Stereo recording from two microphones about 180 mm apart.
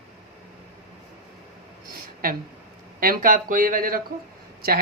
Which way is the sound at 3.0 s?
50° right (ahead or behind).